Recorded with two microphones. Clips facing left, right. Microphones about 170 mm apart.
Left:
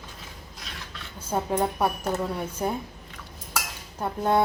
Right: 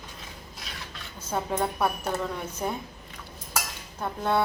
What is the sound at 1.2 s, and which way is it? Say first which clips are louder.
A woman's voice: left 3 dB; 10° left (ahead or behind).